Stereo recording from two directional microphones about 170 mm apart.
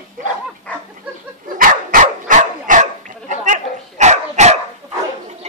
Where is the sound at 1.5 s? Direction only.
55° right (ahead or behind).